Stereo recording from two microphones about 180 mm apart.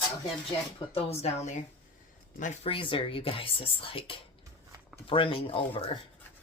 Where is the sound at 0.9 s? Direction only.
35° left (ahead or behind).